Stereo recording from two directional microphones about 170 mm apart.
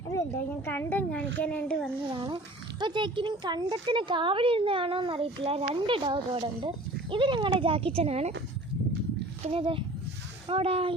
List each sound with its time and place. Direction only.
0.1 s speech: 15° left (ahead or behind)
2.0 s speech: 30° right (ahead or behind)
9.4 s speech: 35° right (ahead or behind)